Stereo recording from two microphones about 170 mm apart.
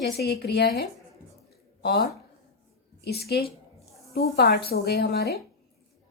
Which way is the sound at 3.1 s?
70° left (ahead or behind).